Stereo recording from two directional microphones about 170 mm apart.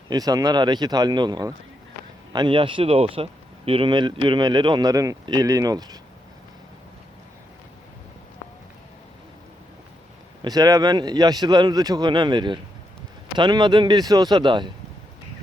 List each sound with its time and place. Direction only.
0.1 s a man's voice: 20° right (ahead or behind)
10.4 s a man's voice: 20° right (ahead or behind)